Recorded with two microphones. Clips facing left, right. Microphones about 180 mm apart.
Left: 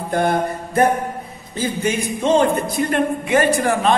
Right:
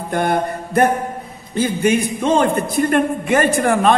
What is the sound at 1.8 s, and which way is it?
A man's voice, 55° right (ahead or behind).